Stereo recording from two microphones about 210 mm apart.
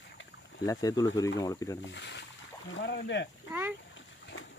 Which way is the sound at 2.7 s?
55° left (ahead or behind).